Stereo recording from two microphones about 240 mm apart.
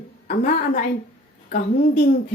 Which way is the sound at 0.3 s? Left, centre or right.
Left.